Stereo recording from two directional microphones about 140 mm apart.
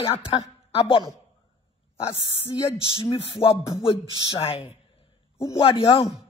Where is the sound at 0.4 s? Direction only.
40° left (ahead or behind).